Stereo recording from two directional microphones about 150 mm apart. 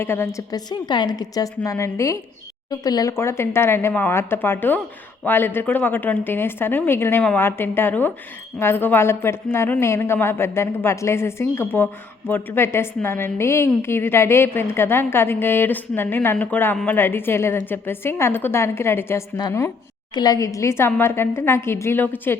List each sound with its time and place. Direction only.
0.0 s a woman's voice: 15° left (ahead or behind)